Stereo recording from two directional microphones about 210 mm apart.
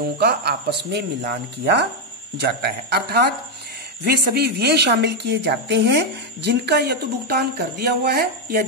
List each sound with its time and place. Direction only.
0.2 s speech: 50° right (ahead or behind)